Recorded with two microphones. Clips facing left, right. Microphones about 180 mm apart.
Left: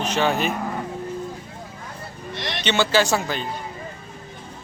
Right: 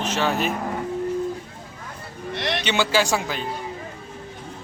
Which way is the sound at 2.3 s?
60° right (ahead or behind).